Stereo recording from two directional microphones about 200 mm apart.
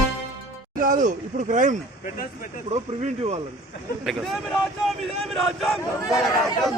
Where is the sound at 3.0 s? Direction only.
35° right (ahead or behind).